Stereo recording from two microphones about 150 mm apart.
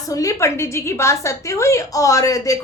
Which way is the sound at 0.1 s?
20° left (ahead or behind).